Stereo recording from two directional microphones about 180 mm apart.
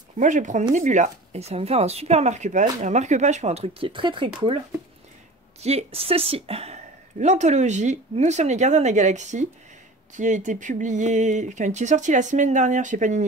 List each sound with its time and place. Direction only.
0.2 s a woman's voice: 45° right (ahead or behind); by 4.3 s 25° right (ahead or behind)
5.6 s a woman's voice: 35° right (ahead or behind)